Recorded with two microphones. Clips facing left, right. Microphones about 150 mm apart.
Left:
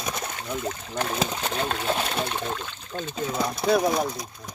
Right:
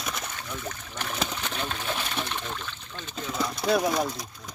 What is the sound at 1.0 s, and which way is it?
Speech, 45° left (ahead or behind).